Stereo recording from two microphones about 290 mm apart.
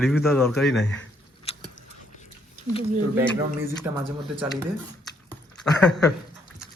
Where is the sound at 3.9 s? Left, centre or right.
Centre.